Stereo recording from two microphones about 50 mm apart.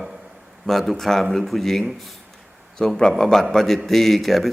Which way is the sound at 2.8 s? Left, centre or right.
Centre.